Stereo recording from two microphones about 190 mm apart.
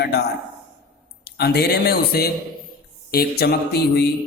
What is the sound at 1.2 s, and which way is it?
A man's voice, 55° left (ahead or behind).